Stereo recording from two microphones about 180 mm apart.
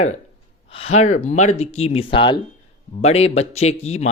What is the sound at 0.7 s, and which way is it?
Speech, 35° left (ahead or behind).